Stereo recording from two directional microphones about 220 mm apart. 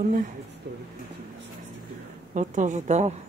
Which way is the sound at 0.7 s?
50° right (ahead or behind).